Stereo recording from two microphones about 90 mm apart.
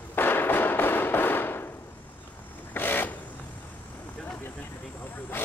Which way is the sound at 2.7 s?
20° left (ahead or behind).